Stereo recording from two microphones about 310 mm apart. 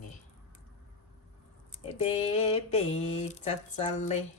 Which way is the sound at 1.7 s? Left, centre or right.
Centre.